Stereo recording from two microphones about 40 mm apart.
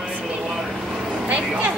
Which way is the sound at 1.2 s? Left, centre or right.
Right.